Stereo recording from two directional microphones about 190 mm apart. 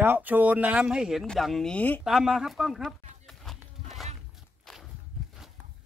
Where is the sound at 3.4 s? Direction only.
Centre (ahead or behind).